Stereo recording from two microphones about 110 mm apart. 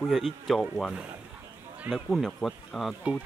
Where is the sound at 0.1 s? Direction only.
Centre (ahead or behind).